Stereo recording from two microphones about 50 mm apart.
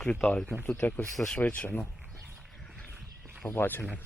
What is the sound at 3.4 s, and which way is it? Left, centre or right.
Speech, left.